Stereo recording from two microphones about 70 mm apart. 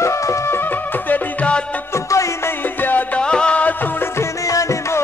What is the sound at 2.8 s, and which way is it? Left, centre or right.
Music, left.